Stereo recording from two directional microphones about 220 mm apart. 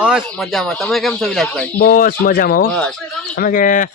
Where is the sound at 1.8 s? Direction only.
40° left (ahead or behind).